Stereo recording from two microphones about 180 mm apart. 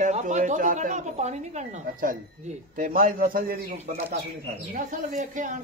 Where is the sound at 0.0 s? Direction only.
40° right (ahead or behind).